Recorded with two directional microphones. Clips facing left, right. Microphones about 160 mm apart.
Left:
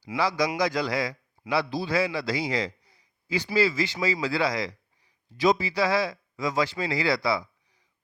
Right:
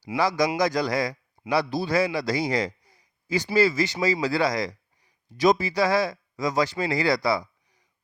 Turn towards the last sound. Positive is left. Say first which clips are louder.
# right 2 dB
turn(degrees=-45)  # may be behind; listen again after turning